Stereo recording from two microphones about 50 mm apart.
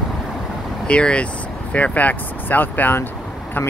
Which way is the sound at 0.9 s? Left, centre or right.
Left.